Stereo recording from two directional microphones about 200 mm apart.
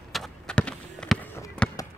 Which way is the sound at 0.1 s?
5° left (ahead or behind).